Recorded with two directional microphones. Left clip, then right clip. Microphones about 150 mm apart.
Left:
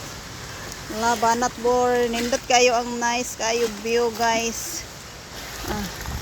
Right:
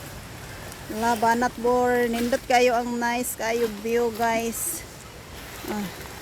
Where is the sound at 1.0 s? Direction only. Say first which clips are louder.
Left 1 dB; 30° right (ahead or behind).